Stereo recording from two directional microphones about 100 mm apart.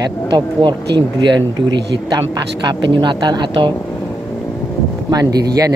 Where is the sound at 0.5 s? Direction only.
50° right (ahead or behind).